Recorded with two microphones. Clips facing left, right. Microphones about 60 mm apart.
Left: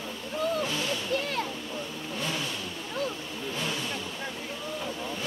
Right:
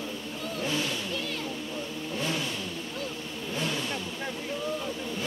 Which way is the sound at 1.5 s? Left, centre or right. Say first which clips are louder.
Right 1 dB; centre.